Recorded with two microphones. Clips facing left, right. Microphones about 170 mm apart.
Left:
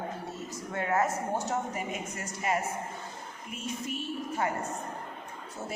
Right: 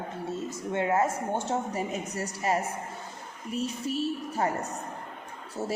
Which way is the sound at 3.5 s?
35° right (ahead or behind).